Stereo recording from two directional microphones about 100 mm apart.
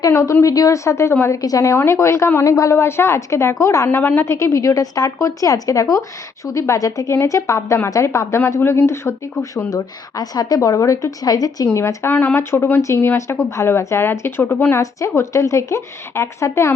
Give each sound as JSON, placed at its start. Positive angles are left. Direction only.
{"t": 0.0, "sound": "a woman's voice", "side_deg": 30}
{"t": 3.8, "sound": "a woman's voice", "side_deg": 15}
{"t": 9.7, "sound": "a woman's voice", "side_deg": 40}